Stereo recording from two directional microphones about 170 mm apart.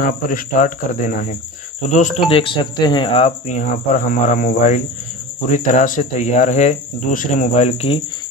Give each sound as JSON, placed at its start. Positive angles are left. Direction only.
{"t": 0.0, "sound": "speech", "side_deg": 50}
{"t": 2.2, "sound": "speech", "side_deg": 30}